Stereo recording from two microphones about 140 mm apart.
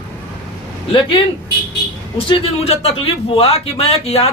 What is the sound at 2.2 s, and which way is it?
Speech, 40° left (ahead or behind).